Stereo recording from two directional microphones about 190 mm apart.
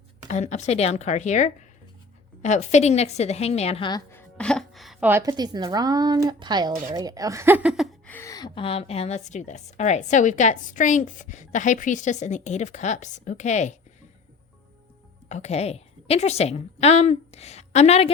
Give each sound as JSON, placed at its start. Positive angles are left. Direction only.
{"t": 0.3, "sound": "speech", "side_deg": 40}
{"t": 4.1, "sound": "music", "side_deg": 5}
{"t": 5.3, "sound": "speech", "side_deg": -20}
{"t": 15.3, "sound": "a woman's voice", "side_deg": 35}